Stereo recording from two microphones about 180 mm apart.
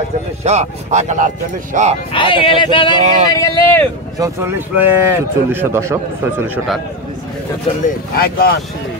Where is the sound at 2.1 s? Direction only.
30° left (ahead or behind).